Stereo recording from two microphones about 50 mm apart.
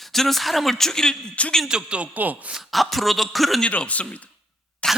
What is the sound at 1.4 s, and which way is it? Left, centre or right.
Speech, left.